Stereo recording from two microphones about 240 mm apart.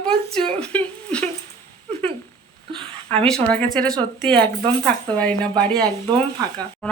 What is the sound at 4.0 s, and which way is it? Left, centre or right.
Speech, centre.